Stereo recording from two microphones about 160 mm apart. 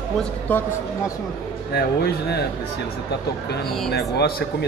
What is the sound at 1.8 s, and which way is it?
Speech, 90° left.